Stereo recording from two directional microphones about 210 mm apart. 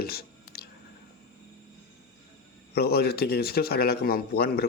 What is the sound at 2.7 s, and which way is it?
Speech, 50° left (ahead or behind).